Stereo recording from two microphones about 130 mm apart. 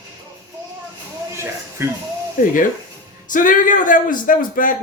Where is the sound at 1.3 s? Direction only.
20° right (ahead or behind).